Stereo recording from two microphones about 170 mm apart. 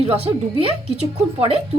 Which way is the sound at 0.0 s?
35° right (ahead or behind).